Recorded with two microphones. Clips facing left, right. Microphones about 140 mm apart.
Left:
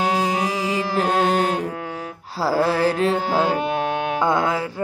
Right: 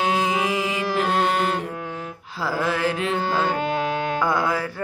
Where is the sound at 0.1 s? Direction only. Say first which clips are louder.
Left 1 dB; 40° left (ahead or behind).